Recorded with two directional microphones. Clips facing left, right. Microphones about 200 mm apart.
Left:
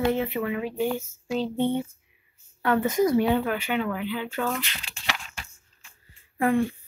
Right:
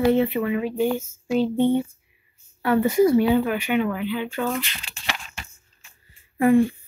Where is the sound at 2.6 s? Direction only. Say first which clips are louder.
Right 4 dB; 10° right (ahead or behind).